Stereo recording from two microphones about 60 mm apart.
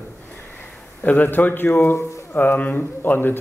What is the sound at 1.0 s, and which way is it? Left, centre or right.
Speech, left.